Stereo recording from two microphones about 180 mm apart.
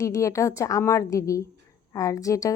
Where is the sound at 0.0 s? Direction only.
15° left (ahead or behind).